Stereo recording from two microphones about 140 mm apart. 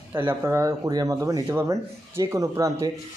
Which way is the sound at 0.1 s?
15° right (ahead or behind).